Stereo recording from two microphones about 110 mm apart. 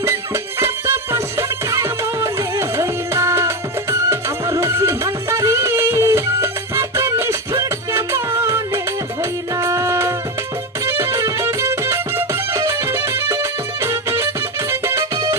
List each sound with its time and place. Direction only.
0.0 s music: 25° right (ahead or behind)
2.8 s music: 25° right (ahead or behind)